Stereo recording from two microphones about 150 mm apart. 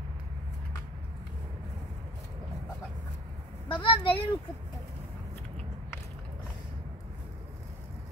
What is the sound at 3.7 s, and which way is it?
Speech, 35° left (ahead or behind).